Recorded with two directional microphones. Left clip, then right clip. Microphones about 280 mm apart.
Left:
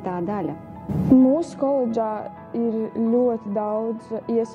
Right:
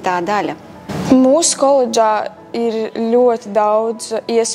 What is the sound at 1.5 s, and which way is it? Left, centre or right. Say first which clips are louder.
Speech: right 10 dB; right.